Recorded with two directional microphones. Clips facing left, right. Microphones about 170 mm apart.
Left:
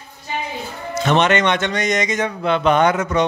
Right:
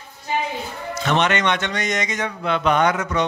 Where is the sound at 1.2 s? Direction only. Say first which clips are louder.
Left 3 dB; 25° left (ahead or behind).